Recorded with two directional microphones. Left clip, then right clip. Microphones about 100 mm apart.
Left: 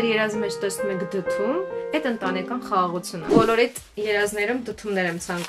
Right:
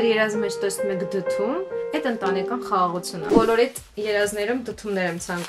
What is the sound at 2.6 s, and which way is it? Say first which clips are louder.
Speech: even; 5° right (ahead or behind).